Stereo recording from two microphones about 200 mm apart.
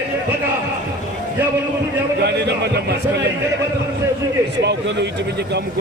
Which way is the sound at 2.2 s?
55° right (ahead or behind).